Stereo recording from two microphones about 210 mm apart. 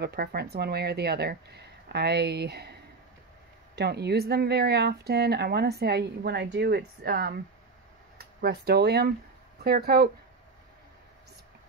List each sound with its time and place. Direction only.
0.0 s speech: 50° right (ahead or behind)
3.7 s speech: 50° right (ahead or behind)
8.4 s speech: 50° right (ahead or behind)